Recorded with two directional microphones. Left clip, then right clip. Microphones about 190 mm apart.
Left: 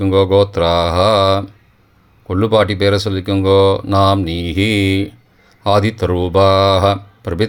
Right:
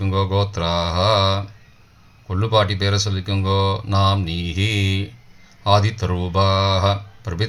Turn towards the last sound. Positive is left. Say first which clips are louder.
# left 9 dB
turn(degrees=45)  # may be behind; listen again after turning